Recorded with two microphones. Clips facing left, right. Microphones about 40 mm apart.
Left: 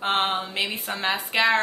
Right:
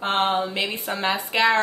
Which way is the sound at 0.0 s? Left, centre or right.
Centre.